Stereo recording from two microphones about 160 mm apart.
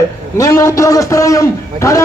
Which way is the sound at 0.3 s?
20° left (ahead or behind).